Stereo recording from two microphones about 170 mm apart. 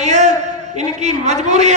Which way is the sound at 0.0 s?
45° right (ahead or behind).